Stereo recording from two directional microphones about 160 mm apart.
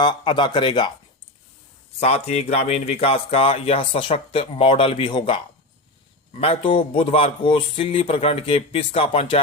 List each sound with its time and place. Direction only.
0.0 s speech: 30° left (ahead or behind)
2.0 s speech: 40° left (ahead or behind)